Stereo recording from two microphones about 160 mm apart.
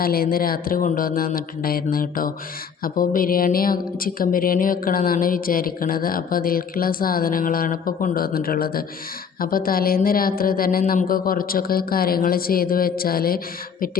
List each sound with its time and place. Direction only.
0.0 s a woman's voice: 70° left (ahead or behind)